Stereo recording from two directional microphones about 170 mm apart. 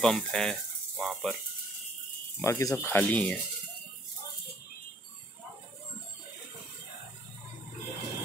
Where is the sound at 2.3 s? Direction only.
20° left (ahead or behind).